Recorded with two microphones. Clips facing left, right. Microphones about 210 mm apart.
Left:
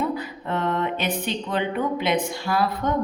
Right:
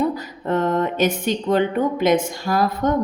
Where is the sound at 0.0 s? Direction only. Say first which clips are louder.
Right 4 dB; 40° right (ahead or behind).